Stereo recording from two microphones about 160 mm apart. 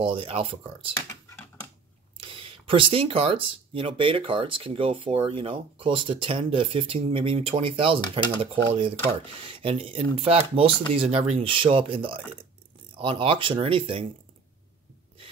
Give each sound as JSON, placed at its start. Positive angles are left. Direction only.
{"t": 0.0, "sound": "speech", "side_deg": -35}
{"t": 0.9, "sound": "computer keyboard", "side_deg": 20}
{"t": 2.1, "sound": "speech", "side_deg": -35}